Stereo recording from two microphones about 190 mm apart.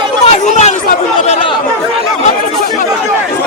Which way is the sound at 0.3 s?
35° left (ahead or behind).